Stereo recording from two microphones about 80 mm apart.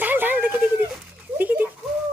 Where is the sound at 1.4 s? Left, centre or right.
Right.